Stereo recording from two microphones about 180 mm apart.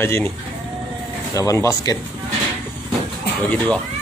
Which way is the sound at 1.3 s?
20° left (ahead or behind).